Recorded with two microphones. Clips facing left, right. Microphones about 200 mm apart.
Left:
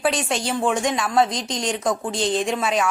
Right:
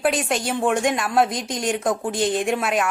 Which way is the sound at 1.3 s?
55° right (ahead or behind).